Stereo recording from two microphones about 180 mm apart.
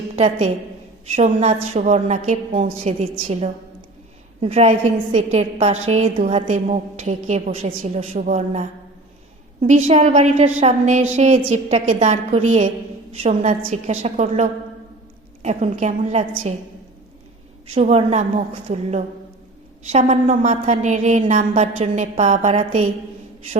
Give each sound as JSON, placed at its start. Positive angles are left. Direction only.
{"t": 0.2, "sound": "a woman's voice", "side_deg": -35}
{"t": 15.4, "sound": "a woman's voice", "side_deg": -40}
{"t": 17.7, "sound": "a woman's voice", "side_deg": -40}